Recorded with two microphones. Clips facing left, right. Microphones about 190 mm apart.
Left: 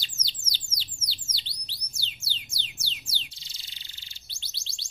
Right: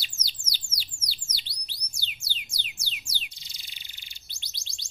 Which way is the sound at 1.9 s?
15° right (ahead or behind).